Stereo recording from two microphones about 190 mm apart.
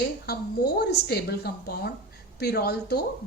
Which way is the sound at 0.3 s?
55° left (ahead or behind).